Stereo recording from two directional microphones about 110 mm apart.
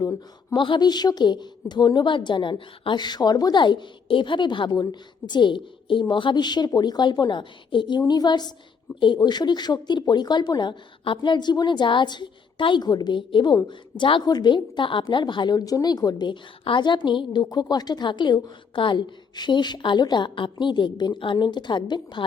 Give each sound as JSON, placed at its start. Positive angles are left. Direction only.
{"t": 0.5, "sound": "a woman's voice", "side_deg": 45}